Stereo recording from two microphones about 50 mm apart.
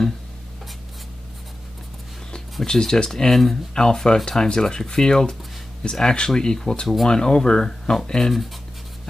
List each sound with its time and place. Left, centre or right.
2.6 s speech: centre
8.2 s speech: centre